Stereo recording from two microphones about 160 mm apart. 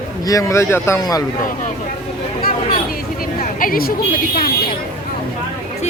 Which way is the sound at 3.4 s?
60° left (ahead or behind).